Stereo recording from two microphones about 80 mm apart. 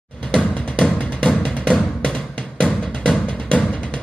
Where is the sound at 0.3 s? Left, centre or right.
Centre.